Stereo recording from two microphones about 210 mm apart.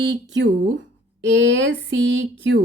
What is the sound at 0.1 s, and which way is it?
Speech, 55° right (ahead or behind).